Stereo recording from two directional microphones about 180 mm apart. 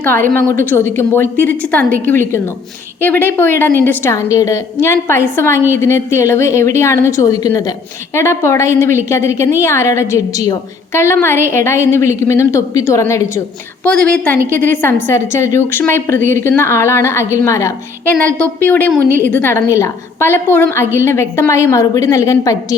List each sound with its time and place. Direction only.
0.0 s a woman's voice: 10° left (ahead or behind)